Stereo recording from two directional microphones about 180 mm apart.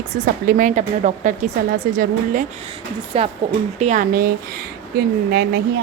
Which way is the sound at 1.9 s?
55° right (ahead or behind).